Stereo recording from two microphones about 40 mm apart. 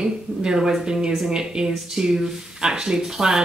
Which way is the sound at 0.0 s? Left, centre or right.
Centre.